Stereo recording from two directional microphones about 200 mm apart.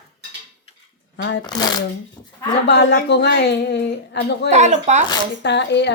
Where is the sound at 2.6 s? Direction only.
60° left (ahead or behind).